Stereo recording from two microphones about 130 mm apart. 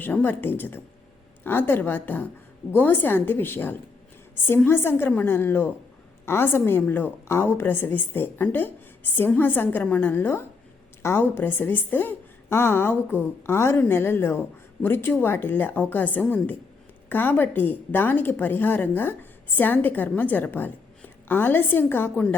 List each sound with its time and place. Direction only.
0.0 s a woman's voice: 15° left (ahead or behind)